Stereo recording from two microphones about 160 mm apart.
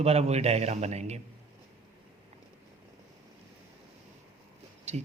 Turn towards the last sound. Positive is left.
turn(degrees=-45)  # may be behind; listen again after turning